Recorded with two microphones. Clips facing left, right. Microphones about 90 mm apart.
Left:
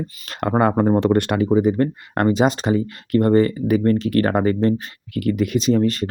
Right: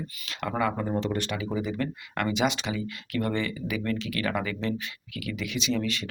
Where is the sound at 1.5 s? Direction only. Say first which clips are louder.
Left 13 dB; 45° left (ahead or behind).